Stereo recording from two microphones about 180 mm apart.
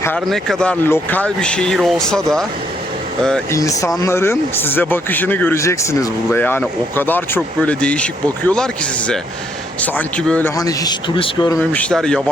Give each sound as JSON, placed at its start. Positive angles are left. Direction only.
{"t": 0.3, "sound": "speech", "side_deg": 5}
{"t": 3.5, "sound": "speech", "side_deg": 20}
{"t": 10.6, "sound": "a man's voice", "side_deg": 20}
{"t": 11.7, "sound": "speech", "side_deg": 5}